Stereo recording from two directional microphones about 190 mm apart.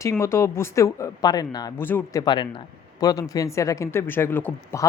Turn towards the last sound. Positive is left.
turn(degrees=15)  # may be behind; listen again after turning